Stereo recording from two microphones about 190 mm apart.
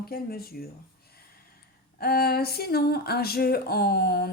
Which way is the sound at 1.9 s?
55° left (ahead or behind).